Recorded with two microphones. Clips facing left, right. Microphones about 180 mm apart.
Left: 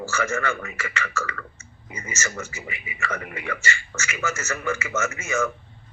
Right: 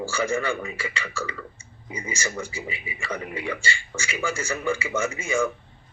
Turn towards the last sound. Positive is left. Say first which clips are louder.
# right 1 dB
turn(degrees=-10)  # may be behind; listen again after turning